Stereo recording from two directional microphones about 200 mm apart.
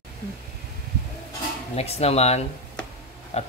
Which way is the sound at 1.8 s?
30° left (ahead or behind).